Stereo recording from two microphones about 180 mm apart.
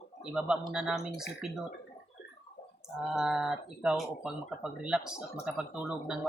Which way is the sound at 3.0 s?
Centre (ahead or behind).